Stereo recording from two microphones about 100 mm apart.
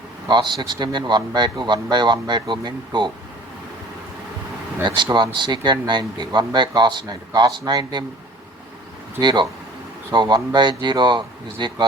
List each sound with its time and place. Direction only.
0.3 s speech: 50° right (ahead or behind)
5.1 s speech: 50° right (ahead or behind)
9.2 s speech: 50° right (ahead or behind)